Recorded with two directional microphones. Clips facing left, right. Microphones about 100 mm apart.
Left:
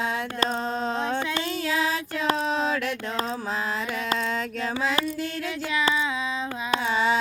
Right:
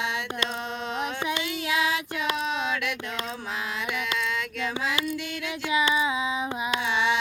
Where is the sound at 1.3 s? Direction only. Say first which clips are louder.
Left 1 dB; 35° left (ahead or behind).